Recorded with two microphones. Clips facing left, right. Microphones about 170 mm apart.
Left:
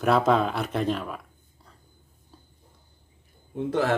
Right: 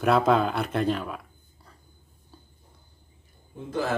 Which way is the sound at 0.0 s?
Centre (ahead or behind).